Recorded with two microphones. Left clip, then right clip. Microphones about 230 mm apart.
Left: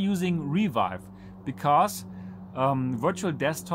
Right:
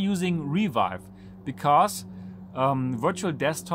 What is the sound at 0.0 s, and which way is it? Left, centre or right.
Speech, centre.